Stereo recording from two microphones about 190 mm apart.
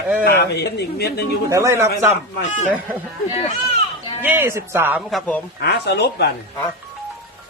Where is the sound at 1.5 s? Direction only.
15° right (ahead or behind).